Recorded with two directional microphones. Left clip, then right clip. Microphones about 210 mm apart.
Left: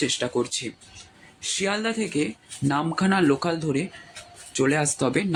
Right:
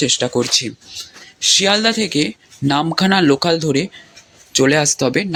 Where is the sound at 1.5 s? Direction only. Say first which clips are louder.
Right 9 dB; 15° right (ahead or behind).